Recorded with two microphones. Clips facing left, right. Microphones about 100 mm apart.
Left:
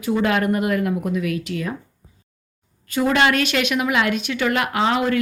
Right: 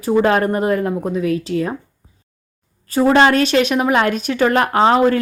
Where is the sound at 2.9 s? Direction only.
35° right (ahead or behind).